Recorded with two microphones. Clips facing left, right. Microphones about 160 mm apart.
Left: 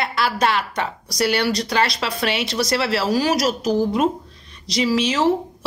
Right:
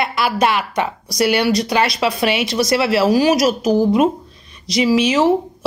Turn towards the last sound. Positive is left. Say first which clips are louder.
# right 4 dB
turn(degrees=-15)  # may be behind; listen again after turning